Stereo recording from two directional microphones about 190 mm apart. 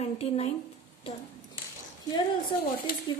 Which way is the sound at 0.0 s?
30° left (ahead or behind).